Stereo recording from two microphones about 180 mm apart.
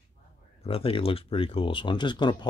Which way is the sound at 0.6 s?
30° left (ahead or behind).